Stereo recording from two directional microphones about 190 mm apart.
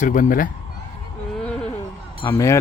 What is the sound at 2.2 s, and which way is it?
Speech, 15° left (ahead or behind).